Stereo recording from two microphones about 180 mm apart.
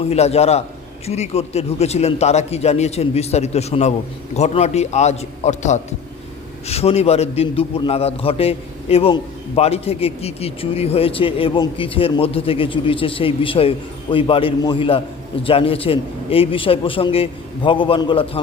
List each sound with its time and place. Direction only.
0.1 s a man's voice: 35° left (ahead or behind)